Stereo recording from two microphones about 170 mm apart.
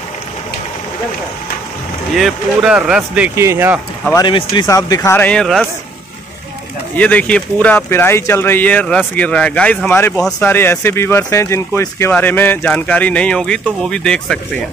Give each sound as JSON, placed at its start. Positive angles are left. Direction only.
{"t": 2.1, "sound": "speech", "side_deg": 0}
{"t": 4.1, "sound": "speech", "side_deg": 25}
{"t": 7.0, "sound": "speech", "side_deg": 10}